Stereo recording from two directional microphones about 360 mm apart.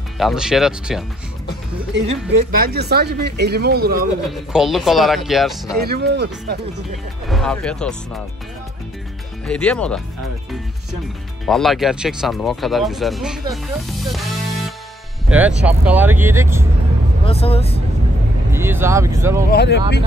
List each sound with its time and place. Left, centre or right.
0.2 s speech: centre
2.0 s speech: right
4.3 s speech: centre
5.8 s speech: right
7.2 s speech: centre
9.5 s speech: centre
11.4 s speech: centre
17.2 s speech: centre
18.5 s speech: centre
19.5 s speech: left